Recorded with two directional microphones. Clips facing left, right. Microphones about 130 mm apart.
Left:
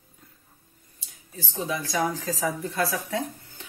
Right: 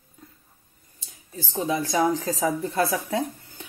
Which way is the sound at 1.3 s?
30° right (ahead or behind).